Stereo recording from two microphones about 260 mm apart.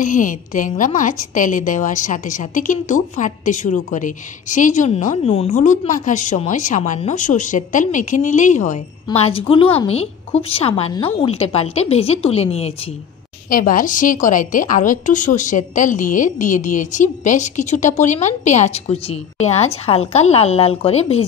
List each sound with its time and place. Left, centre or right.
0.0 s a woman's voice: left